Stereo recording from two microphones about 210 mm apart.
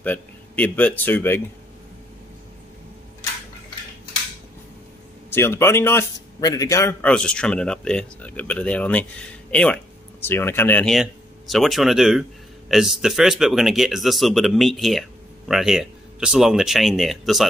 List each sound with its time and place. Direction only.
0.0 s speech: 10° left (ahead or behind)
5.3 s speech: 10° left (ahead or behind)